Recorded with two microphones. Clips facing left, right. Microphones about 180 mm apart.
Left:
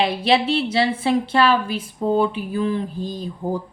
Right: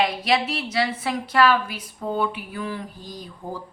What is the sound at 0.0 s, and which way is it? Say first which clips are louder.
A woman's voice: left 3 dB; 30° left (ahead or behind).